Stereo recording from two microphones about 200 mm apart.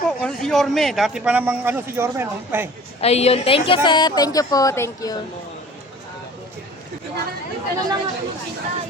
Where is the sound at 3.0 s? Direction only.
30° left (ahead or behind); by 5.1 s 15° left (ahead or behind).